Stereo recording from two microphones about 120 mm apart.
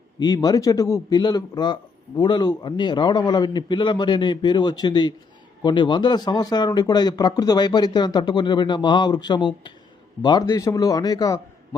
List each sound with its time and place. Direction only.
0.2 s a man's voice: 35° left (ahead or behind)